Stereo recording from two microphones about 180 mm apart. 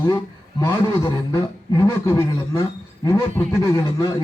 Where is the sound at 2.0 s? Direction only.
15° left (ahead or behind).